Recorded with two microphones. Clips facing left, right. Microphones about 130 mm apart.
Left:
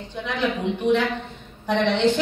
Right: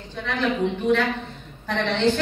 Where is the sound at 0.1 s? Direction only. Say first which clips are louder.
Left 1 dB; 15° left (ahead or behind).